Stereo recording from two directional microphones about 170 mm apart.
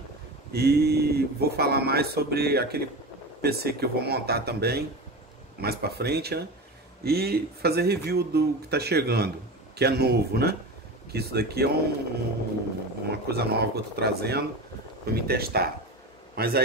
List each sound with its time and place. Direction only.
0.5 s speech: 70° right (ahead or behind)
13.1 s a man's voice: 70° right (ahead or behind)